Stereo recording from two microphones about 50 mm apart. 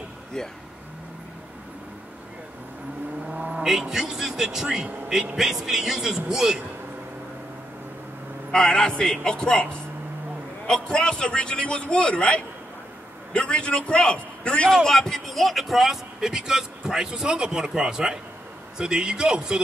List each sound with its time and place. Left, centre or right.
3.5 s speech: centre
8.5 s a man's voice: centre
10.7 s a man's voice: centre
14.7 s speech: centre